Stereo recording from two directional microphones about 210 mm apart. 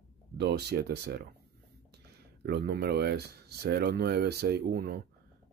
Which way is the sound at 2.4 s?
50° right (ahead or behind).